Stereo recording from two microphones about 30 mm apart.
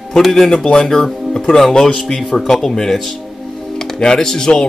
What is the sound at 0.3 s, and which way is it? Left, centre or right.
Speech, centre.